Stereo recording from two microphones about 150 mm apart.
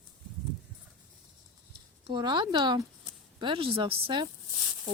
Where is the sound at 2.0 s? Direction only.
30° right (ahead or behind).